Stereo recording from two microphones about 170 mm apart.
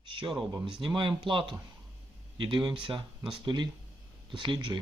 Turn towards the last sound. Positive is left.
turn(degrees=-25)  # may be behind; listen again after turning